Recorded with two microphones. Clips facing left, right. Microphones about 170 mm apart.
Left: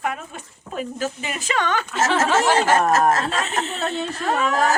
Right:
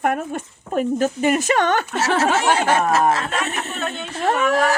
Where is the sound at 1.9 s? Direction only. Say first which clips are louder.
Left 3 dB; 45° left (ahead or behind).